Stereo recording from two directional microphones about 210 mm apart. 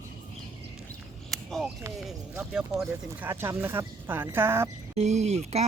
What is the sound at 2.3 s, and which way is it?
Speech, 5° right (ahead or behind).